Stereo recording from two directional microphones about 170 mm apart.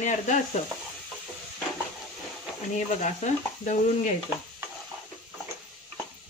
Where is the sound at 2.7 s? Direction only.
45° left (ahead or behind).